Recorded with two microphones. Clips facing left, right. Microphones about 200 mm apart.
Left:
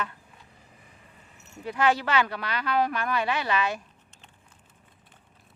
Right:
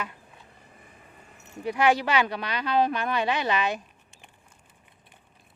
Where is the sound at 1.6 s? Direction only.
15° right (ahead or behind).